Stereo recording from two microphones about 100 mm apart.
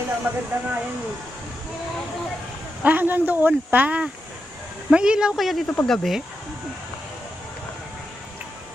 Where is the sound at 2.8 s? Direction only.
20° right (ahead or behind); by 6.2 s 5° left (ahead or behind).